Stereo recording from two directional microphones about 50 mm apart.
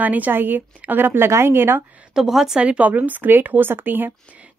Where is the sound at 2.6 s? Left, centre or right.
Right.